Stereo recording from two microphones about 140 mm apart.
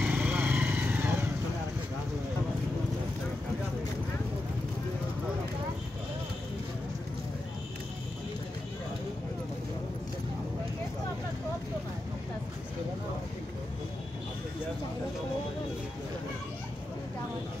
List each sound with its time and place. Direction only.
0.0 s vehicle: 10° right (ahead or behind)